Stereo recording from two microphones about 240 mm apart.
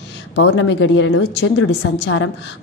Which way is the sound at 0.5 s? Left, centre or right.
Left.